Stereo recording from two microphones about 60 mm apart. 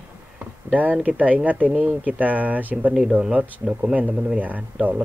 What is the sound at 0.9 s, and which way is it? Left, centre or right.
Speech, right.